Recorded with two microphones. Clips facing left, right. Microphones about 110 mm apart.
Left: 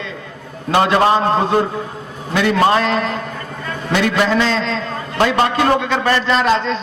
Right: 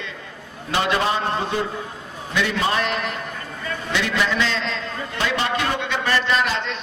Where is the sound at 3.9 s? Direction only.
45° left (ahead or behind).